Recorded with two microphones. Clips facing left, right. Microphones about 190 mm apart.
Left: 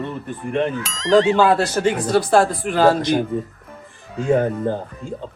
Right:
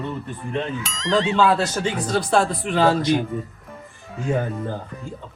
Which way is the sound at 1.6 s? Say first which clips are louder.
Left 5 dB; 60° left (ahead or behind).